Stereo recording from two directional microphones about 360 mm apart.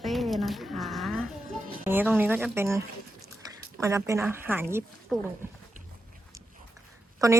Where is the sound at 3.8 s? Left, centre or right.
Centre.